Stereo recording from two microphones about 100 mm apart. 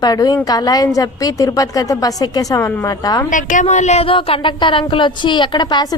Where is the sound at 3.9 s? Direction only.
70° left (ahead or behind).